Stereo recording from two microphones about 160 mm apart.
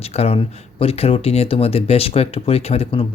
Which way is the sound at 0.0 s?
40° left (ahead or behind).